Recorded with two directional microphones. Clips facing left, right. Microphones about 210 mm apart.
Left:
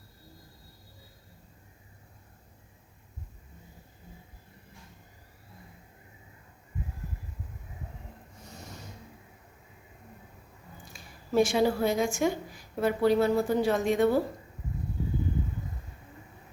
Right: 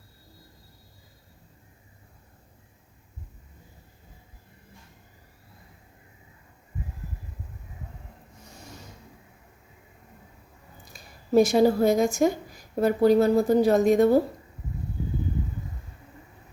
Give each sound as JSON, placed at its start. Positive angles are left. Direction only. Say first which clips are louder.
{"t": 10.9, "sound": "speech", "louder": "right 5 dB", "side_deg": -40}